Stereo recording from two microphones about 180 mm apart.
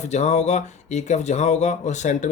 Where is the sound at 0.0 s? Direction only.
40° left (ahead or behind).